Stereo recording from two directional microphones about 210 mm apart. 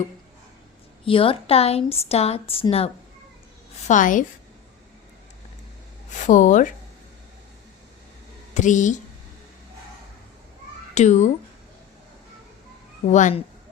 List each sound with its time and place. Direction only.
1.0 s a woman's voice: 25° left (ahead or behind)
3.8 s speech: 40° left (ahead or behind)
6.1 s speech: 35° left (ahead or behind)
8.5 s speech: 35° left (ahead or behind)
10.9 s speech: 35° left (ahead or behind)
13.1 s speech: 35° left (ahead or behind)